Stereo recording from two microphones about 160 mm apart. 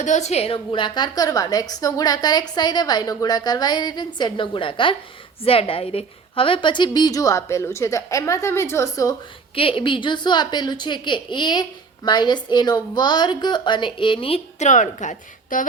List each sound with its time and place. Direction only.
0.0 s a woman's voice: 45° left (ahead or behind); by 9.1 s 20° left (ahead or behind)
9.6 s a woman's voice: 35° left (ahead or behind); by 15.6 s 55° left (ahead or behind)